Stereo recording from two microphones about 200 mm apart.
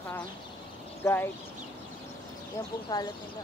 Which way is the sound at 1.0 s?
10° left (ahead or behind).